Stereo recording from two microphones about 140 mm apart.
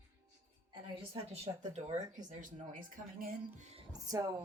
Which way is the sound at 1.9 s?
60° right (ahead or behind).